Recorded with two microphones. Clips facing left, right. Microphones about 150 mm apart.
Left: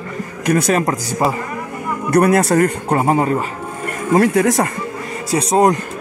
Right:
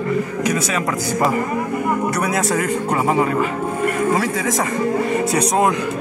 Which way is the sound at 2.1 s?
55° left (ahead or behind).